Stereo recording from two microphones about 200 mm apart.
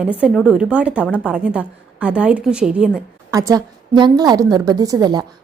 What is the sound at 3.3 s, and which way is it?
A woman's voice, 15° right (ahead or behind).